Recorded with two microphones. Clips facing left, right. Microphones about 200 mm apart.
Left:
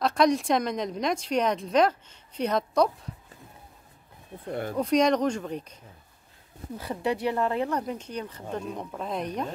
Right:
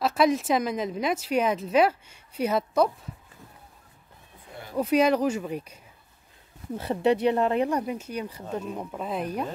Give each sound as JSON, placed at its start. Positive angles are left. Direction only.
{"t": 0.0, "sound": "speech", "side_deg": -5}
{"t": 4.5, "sound": "speech", "side_deg": 55}
{"t": 4.7, "sound": "speech", "side_deg": -5}
{"t": 6.8, "sound": "speech", "side_deg": -25}